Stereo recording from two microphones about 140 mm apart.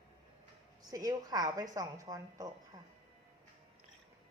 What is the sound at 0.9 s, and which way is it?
A woman's voice, 25° right (ahead or behind).